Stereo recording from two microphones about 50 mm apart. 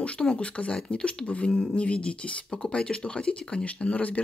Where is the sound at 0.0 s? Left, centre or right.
Left.